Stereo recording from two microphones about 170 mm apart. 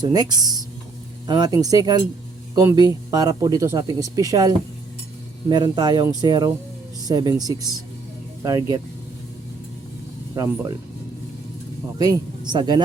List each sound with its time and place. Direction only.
0.0 s speech: 25° right (ahead or behind)
10.3 s speech: 20° right (ahead or behind)
11.9 s speech: 25° right (ahead or behind)